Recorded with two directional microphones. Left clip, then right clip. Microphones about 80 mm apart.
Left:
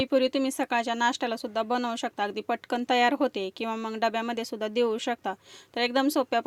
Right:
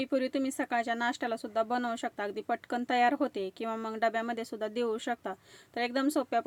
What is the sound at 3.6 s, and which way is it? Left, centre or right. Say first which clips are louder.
Speech: left 2 dB; centre.